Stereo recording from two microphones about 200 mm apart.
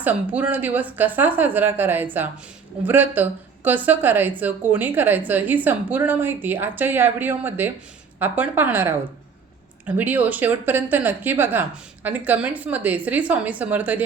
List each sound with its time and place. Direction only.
0.0 s a woman's voice: 5° right (ahead or behind)